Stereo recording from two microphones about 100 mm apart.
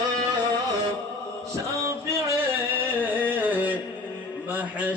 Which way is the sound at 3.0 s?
15° right (ahead or behind).